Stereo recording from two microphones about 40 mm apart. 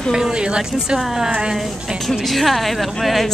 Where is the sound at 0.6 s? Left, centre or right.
Centre.